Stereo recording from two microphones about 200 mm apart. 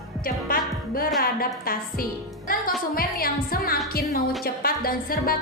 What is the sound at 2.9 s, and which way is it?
A woman's voice, 45° left (ahead or behind).